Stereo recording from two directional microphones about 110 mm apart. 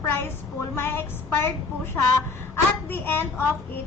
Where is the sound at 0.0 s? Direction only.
20° left (ahead or behind).